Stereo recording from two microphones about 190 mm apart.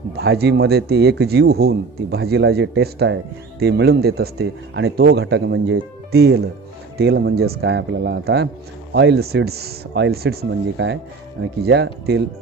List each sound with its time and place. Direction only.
0.2 s a man's voice: 60° right (ahead or behind)